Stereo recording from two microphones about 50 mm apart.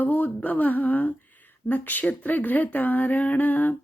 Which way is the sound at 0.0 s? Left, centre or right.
Left.